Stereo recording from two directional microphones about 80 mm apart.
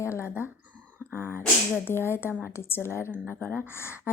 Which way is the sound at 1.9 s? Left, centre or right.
Left.